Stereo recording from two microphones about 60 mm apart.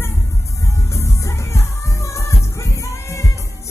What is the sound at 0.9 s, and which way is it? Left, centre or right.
Music, left.